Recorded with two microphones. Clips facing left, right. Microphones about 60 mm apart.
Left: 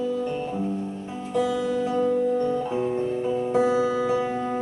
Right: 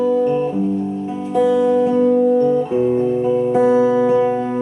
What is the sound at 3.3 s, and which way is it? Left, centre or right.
Music, right.